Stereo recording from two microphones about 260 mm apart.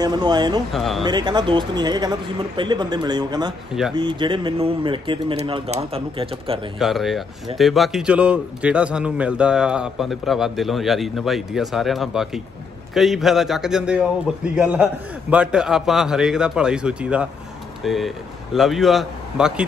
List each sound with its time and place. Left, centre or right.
0.0 s speech: centre
0.7 s a man's voice: centre
1.0 s speech: centre
6.8 s a man's voice: centre